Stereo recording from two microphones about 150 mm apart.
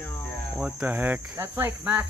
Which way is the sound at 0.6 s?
10° right (ahead or behind).